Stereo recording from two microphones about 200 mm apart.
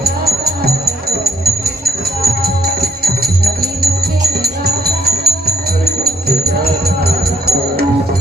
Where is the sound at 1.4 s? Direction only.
50° right (ahead or behind).